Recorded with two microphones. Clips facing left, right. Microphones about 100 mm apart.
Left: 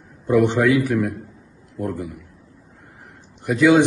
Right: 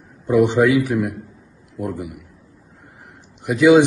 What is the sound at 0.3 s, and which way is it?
A man's voice, 15° right (ahead or behind).